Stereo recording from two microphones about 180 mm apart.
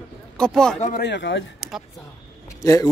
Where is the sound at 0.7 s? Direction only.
45° left (ahead or behind).